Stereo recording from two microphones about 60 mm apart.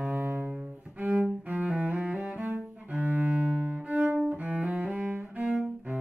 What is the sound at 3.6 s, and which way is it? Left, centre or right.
Cello, right.